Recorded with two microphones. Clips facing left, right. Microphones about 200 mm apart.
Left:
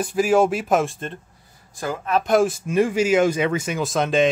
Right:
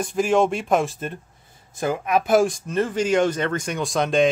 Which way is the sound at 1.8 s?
15° right (ahead or behind).